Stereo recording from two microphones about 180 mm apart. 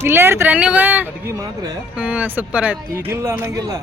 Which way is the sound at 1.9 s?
10° right (ahead or behind).